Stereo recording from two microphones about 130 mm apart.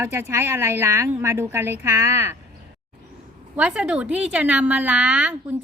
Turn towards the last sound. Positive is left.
turn(degrees=-10)  # may be behind; listen again after turning